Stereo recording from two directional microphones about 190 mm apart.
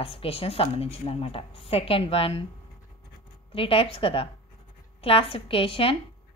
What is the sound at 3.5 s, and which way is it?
A woman's voice, 30° left (ahead or behind).